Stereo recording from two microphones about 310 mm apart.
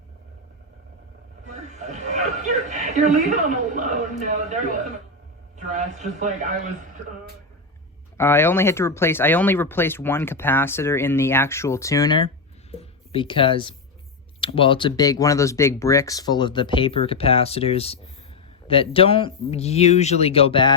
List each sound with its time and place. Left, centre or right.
1.5 s a man's voice: right
8.2 s speech: centre